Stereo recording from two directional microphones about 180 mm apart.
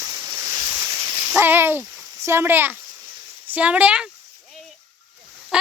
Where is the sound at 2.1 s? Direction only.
15° right (ahead or behind).